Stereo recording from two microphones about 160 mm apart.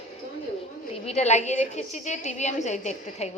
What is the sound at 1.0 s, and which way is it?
A woman's voice, 45° left (ahead or behind).